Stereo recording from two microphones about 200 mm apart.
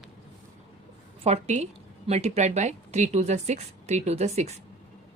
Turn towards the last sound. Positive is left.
turn(degrees=-35)  # may be behind; listen again after turning